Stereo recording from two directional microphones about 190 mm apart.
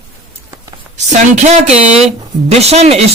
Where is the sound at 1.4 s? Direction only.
35° right (ahead or behind).